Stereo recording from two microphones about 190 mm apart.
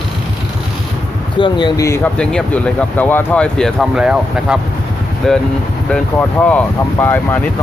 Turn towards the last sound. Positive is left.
turn(degrees=10)  # may be behind; listen again after turning